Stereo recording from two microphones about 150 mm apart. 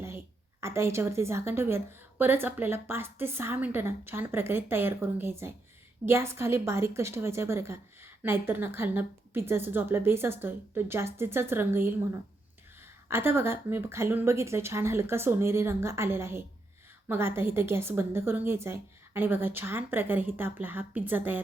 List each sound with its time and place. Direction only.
0.6 s a woman's voice: 20° right (ahead or behind)